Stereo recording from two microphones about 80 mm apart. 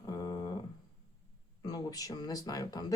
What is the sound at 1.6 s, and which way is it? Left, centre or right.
Speech, left.